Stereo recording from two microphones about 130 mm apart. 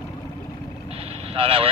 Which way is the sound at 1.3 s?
45° right (ahead or behind).